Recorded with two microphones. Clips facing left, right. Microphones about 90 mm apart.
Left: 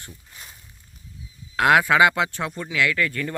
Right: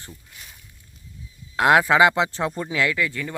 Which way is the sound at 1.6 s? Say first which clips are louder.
Right 1 dB; 25° right (ahead or behind).